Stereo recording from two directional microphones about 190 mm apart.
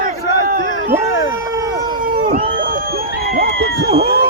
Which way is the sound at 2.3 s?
50° right (ahead or behind).